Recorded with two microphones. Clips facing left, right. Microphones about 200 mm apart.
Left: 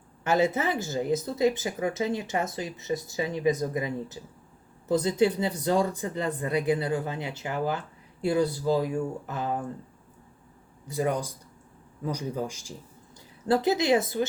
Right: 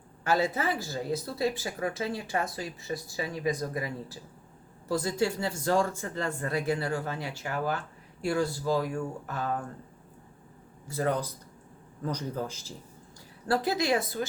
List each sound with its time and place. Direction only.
0.3 s speech: 20° left (ahead or behind)
10.8 s speech: 15° left (ahead or behind)